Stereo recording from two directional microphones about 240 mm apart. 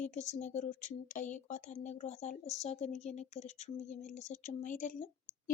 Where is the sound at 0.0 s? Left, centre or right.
Left.